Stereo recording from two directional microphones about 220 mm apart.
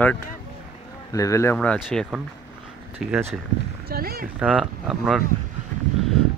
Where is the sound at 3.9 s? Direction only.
45° right (ahead or behind).